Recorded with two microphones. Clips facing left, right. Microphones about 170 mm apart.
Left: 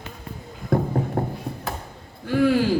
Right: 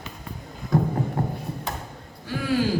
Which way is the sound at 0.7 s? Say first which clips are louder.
Left 1 dB; 55° left (ahead or behind).